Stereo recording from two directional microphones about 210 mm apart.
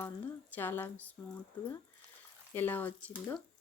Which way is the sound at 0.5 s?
10° left (ahead or behind).